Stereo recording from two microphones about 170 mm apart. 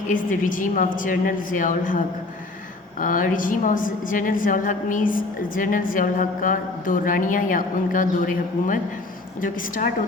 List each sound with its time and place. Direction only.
0.1 s a woman's voice: 50° left (ahead or behind)
3.0 s a woman's voice: 50° left (ahead or behind)